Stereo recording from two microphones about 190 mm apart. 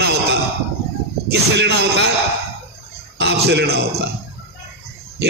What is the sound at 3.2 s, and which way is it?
Speech, 60° right (ahead or behind).